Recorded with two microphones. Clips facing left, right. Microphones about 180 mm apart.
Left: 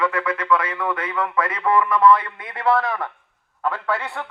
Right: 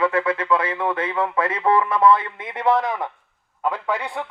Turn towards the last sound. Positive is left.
turn(degrees=-15)  # may be behind; listen again after turning